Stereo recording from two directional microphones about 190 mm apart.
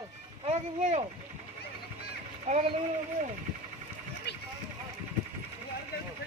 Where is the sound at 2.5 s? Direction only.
35° right (ahead or behind).